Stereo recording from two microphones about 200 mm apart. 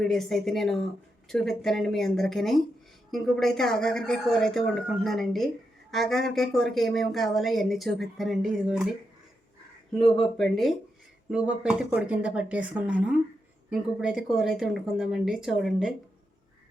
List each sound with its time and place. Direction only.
0.0 s speech: centre (ahead or behind)
9.9 s speech: centre (ahead or behind)